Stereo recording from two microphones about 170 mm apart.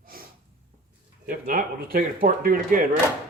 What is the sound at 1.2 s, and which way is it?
Speech, 55° right (ahead or behind).